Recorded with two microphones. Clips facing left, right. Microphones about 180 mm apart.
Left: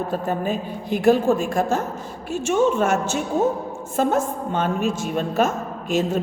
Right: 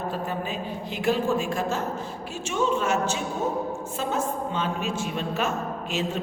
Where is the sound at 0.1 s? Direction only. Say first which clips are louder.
Left 6 dB; 50° left (ahead or behind).